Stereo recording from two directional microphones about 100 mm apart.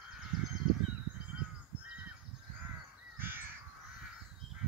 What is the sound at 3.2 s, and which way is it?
Crow, 20° right (ahead or behind).